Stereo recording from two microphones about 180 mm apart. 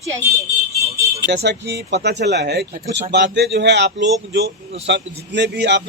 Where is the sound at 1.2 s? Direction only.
70° right (ahead or behind).